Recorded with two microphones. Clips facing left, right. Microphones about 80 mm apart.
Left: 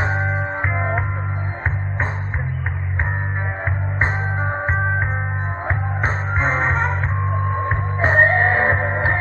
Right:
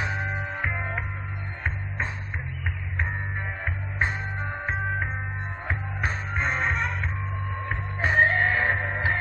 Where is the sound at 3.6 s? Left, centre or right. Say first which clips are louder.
Left 6 dB; left.